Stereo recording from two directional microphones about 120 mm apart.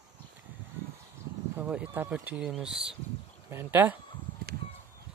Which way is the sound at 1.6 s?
10° right (ahead or behind).